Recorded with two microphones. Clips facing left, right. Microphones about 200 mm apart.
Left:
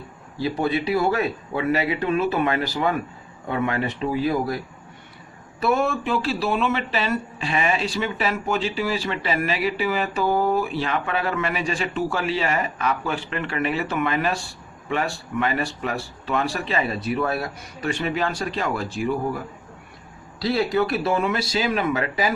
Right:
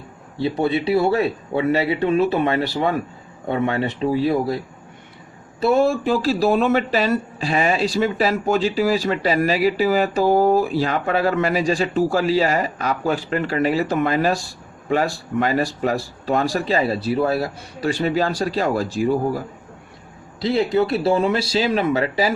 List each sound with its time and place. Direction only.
0.3 s speech: 30° right (ahead or behind)
20.4 s speech: 20° right (ahead or behind)